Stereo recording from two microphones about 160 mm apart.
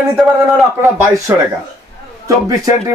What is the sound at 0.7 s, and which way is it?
A man's voice, 20° right (ahead or behind).